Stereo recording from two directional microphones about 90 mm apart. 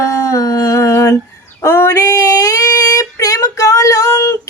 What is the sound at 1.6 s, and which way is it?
Female singing, 30° left (ahead or behind).